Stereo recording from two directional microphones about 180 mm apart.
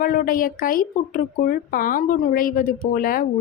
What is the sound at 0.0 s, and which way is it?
A woman's voice, 50° left (ahead or behind).